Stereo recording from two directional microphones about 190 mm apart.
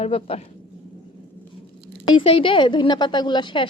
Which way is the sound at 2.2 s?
30° left (ahead or behind).